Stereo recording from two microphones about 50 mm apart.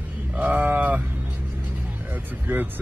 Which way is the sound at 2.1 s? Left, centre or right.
Right.